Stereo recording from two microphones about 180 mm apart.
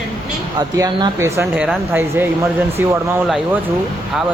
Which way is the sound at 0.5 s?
20° right (ahead or behind).